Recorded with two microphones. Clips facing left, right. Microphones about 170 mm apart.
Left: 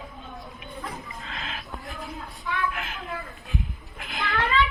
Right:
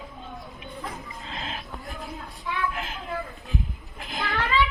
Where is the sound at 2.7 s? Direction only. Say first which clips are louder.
Right 1 dB; 35° right (ahead or behind).